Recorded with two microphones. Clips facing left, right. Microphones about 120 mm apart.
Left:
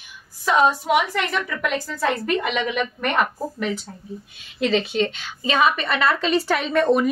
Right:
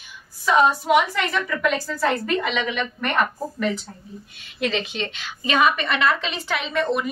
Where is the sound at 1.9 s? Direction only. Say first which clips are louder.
Even; 10° left (ahead or behind).